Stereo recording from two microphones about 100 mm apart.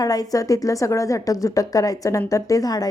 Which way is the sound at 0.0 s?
40° left (ahead or behind).